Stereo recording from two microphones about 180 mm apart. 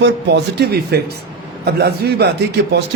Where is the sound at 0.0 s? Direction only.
70° right (ahead or behind).